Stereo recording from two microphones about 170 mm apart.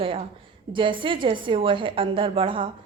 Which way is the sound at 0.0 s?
30° right (ahead or behind).